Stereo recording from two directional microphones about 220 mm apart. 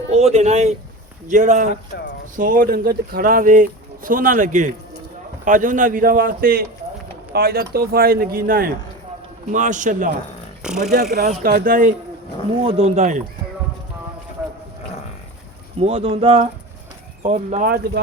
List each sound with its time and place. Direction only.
0.1 s speech: 30° right (ahead or behind)
10.6 s speech: 5° right (ahead or behind)
11.4 s speech: 40° right (ahead or behind)
15.8 s speech: 25° right (ahead or behind); by 18.0 s 40° right (ahead or behind)